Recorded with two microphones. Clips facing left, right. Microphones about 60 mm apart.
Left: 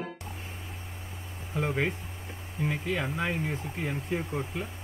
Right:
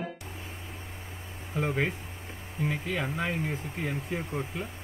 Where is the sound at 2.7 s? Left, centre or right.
Left.